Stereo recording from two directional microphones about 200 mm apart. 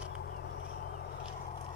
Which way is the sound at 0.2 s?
60° left (ahead or behind).